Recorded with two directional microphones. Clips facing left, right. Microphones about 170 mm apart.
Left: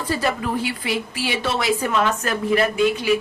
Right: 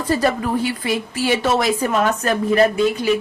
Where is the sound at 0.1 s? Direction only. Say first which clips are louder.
Right 4 dB; 40° right (ahead or behind).